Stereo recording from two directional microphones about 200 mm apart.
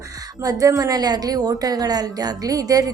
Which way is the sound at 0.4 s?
15° right (ahead or behind).